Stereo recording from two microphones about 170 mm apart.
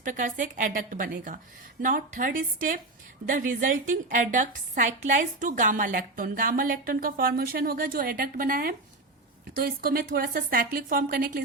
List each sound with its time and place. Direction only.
0.0 s a woman's voice: 50° right (ahead or behind)